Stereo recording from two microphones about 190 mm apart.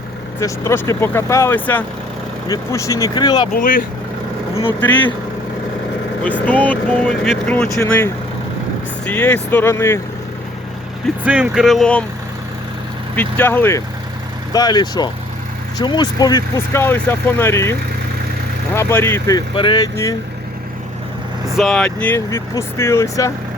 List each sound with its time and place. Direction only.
0.3 s speech: 15° left (ahead or behind)
3.5 s speech: 45° left (ahead or behind)
6.4 s speech: 10° left (ahead or behind)
11.2 s speech: 5° right (ahead or behind)
13.1 s speech: 10° left (ahead or behind)
19.5 s speech: 25° left (ahead or behind)
21.5 s speech: centre (ahead or behind)